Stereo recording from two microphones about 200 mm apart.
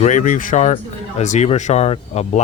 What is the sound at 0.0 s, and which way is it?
Speech, 40° left (ahead or behind).